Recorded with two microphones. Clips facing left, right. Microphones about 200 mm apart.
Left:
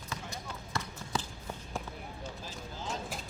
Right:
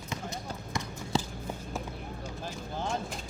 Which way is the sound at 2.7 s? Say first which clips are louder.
Right 6 dB; 60° right (ahead or behind).